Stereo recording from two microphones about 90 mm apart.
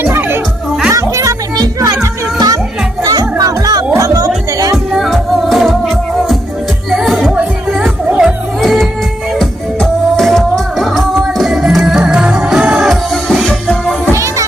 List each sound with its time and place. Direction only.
0.0 s music: 25° right (ahead or behind)
0.9 s music: 35° right (ahead or behind)
4.9 s music: centre (ahead or behind)
7.8 s music: 15° right (ahead or behind)
8.6 s music: centre (ahead or behind)
13.2 s music: centre (ahead or behind)